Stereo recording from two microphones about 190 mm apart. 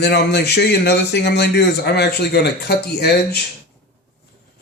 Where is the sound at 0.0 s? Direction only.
60° left (ahead or behind).